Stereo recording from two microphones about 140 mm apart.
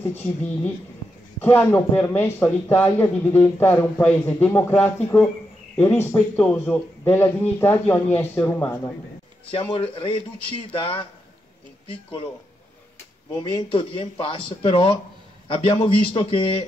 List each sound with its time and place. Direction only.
1.4 s speech: 15° left (ahead or behind)
9.5 s speech: 40° left (ahead or behind)
13.4 s speech: 35° left (ahead or behind)